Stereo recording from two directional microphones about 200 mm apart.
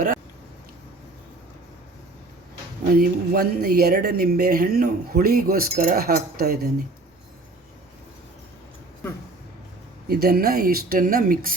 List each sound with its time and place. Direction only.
3.0 s speech: 50° right (ahead or behind)
10.1 s speech: 50° right (ahead or behind)